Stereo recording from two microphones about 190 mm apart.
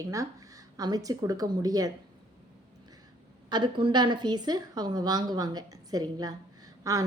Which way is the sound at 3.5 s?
25° right (ahead or behind).